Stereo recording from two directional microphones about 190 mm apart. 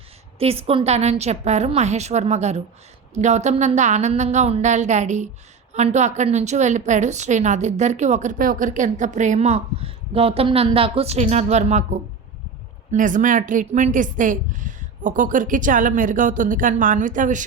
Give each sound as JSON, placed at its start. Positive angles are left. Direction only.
{"t": 0.3, "sound": "a woman's voice", "side_deg": -30}